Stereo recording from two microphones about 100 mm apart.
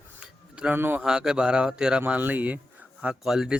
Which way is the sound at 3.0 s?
5° right (ahead or behind).